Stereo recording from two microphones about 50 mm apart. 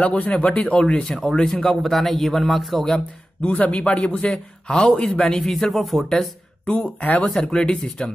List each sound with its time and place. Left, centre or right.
0.0 s a man's voice: left; by 2.8 s centre
3.4 s a man's voice: left; by 6.3 s centre
6.6 s a man's voice: left